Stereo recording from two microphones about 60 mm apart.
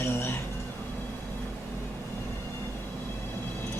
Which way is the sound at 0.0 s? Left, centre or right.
Left.